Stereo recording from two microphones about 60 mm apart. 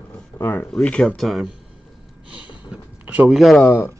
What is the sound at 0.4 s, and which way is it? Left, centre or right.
Speech, left.